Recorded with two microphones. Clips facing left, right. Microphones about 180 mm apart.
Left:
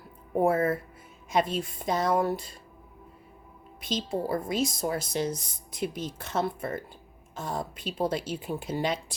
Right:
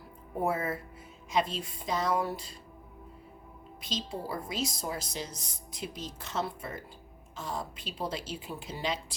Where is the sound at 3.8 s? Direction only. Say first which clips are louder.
Left 7 dB; 50° left (ahead or behind).